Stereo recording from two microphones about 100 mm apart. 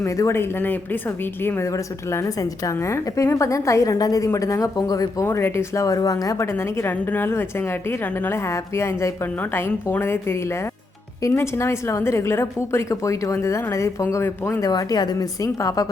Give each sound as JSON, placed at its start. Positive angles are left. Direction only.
{"t": 0.0, "sound": "a woman's voice", "side_deg": 30}
{"t": 5.2, "sound": "a woman's voice", "side_deg": 25}
{"t": 6.9, "sound": "a woman's voice", "side_deg": 15}
{"t": 14.6, "sound": "a woman's voice", "side_deg": 40}